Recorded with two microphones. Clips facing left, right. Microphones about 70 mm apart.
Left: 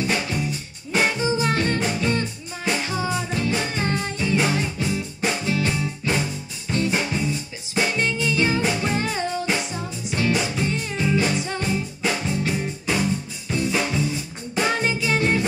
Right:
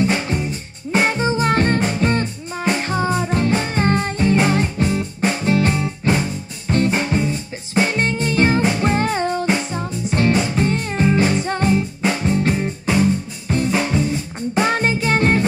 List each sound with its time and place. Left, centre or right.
0.0 s music: right
14.5 s music: right